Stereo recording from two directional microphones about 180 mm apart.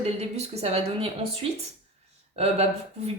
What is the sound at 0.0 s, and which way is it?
Speech, 35° right (ahead or behind).